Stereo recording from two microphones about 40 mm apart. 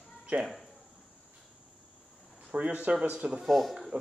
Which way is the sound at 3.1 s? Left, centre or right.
Right.